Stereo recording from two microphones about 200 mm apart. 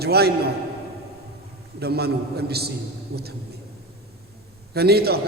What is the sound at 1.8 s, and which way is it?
A man's voice, 55° right (ahead or behind).